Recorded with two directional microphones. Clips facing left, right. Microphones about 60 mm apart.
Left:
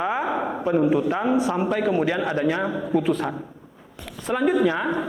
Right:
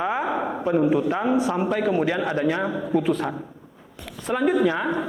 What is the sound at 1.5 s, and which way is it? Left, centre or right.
A man's voice, left.